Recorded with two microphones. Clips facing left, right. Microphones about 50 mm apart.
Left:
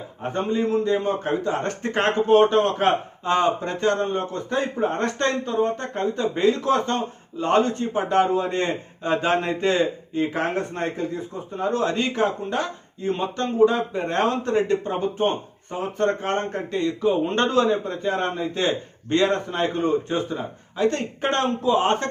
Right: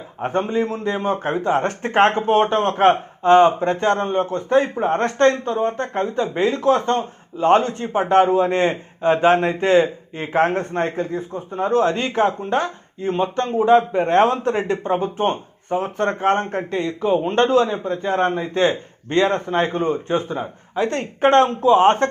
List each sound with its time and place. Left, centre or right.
0.2 s speech: right
6.0 s speech: right
10.3 s speech: right
15.8 s speech: right
16.7 s a man's voice: centre
18.0 s speech: right